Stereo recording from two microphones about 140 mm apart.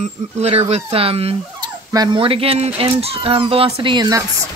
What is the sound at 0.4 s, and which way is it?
Speech, 50° right (ahead or behind).